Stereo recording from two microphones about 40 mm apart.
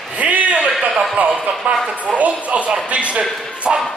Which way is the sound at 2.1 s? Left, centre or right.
Right.